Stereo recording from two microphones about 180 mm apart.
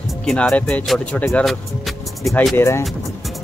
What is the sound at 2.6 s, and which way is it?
Speech, 15° left (ahead or behind).